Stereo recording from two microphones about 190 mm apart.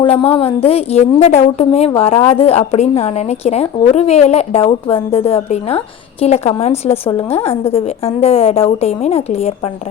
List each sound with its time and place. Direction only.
0.0 s a woman's voice: 30° left (ahead or behind)